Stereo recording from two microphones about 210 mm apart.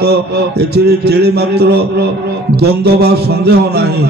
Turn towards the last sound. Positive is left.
turn(degrees=-50)  # may be behind; listen again after turning